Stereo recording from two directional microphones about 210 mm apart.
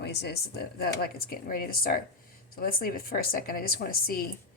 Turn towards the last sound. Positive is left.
turn(degrees=45)  # may be behind; listen again after turning